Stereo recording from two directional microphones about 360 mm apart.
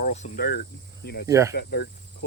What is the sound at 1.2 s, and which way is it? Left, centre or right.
Speech, centre.